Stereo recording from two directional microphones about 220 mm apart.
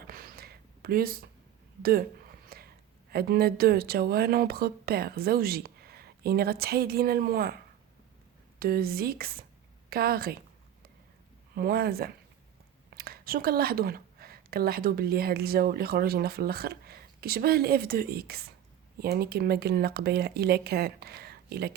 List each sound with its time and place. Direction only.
0.1 s a sound: 40° right (ahead or behind)
3.1 s a woman's voice: 45° right (ahead or behind)
11.5 s a woman's voice: 45° right (ahead or behind)